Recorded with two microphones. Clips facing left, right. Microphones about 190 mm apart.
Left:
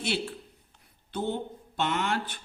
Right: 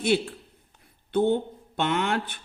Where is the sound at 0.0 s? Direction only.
50° right (ahead or behind).